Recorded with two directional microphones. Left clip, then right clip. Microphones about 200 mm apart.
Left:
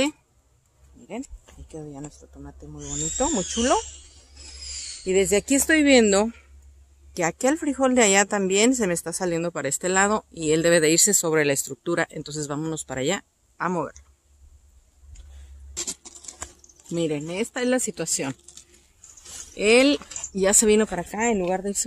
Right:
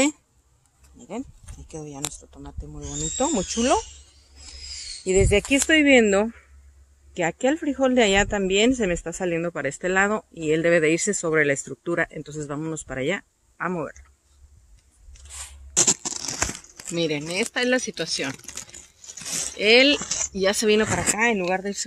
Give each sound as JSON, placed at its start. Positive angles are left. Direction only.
{"t": 1.7, "sound": "speech", "side_deg": -15}
{"t": 5.0, "sound": "speech", "side_deg": -15}
{"t": 5.3, "sound": "speech", "side_deg": 0}
{"t": 5.8, "sound": "speech", "side_deg": 10}
{"t": 7.3, "sound": "speech", "side_deg": 0}
{"t": 15.7, "sound": "a sound", "side_deg": -40}
{"t": 16.9, "sound": "speech", "side_deg": 20}
{"t": 19.5, "sound": "speech", "side_deg": 30}
{"t": 20.0, "sound": "a sound", "side_deg": -35}
{"t": 20.3, "sound": "speech", "side_deg": 30}
{"t": 21.4, "sound": "speech", "side_deg": 5}